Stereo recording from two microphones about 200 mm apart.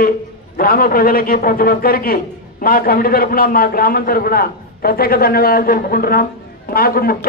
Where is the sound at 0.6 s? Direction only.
45° left (ahead or behind).